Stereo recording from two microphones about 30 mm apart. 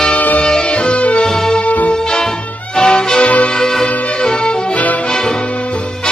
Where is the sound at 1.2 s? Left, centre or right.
Centre.